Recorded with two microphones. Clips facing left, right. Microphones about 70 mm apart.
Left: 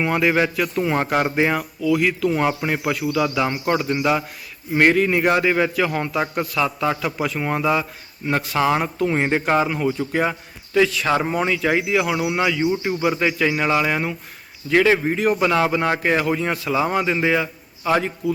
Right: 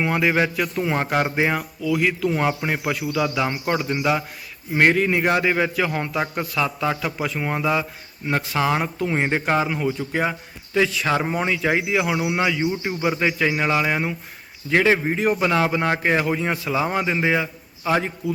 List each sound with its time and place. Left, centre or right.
0.2 s speech: centre
1.9 s speech: centre
2.3 s speech: centre
7.3 s speech: centre
10.1 s speech: centre
12.3 s speech: centre
15.3 s speech: centre
16.6 s a man's voice: centre